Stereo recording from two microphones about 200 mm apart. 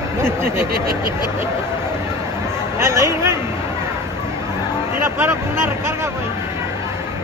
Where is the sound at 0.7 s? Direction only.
50° right (ahead or behind).